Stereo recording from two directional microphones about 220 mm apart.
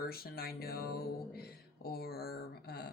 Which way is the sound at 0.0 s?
45° left (ahead or behind).